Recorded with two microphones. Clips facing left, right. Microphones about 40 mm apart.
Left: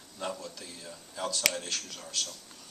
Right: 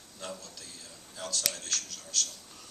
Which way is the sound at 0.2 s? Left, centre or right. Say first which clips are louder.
Left 5 dB; left.